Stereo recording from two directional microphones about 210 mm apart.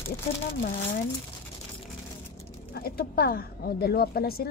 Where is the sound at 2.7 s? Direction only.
45° left (ahead or behind).